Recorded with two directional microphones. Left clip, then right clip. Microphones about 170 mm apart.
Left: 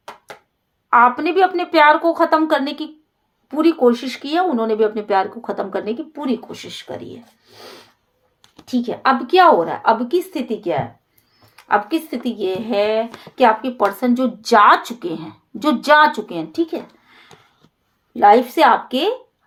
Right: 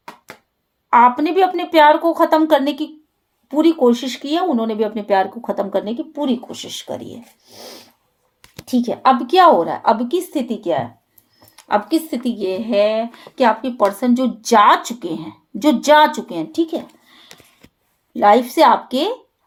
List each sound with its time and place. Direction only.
0.9 s speech: 40° right (ahead or behind)
6.7 s a woman's voice: 60° right (ahead or behind); by 16.8 s 40° right (ahead or behind)
18.1 s speech: 40° right (ahead or behind)